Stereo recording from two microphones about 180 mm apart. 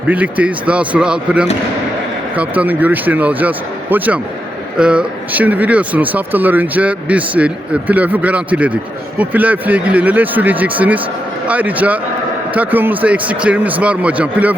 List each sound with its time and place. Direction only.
0.1 s speech: 10° right (ahead or behind)